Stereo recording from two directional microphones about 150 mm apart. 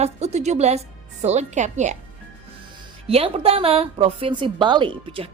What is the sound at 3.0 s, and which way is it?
A woman's voice, 40° right (ahead or behind).